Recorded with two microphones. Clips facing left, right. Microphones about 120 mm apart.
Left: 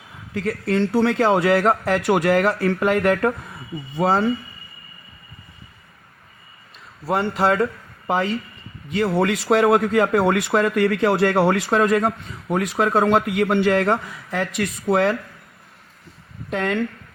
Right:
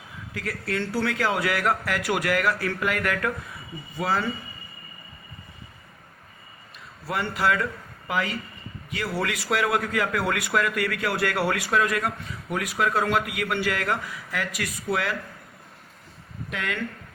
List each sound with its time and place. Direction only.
0.3 s a man's voice: 25° left (ahead or behind)
7.1 s a man's voice: 30° left (ahead or behind)
16.5 s speech: 40° left (ahead or behind)